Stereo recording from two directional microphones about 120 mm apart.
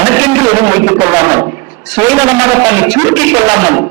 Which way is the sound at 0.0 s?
20° right (ahead or behind).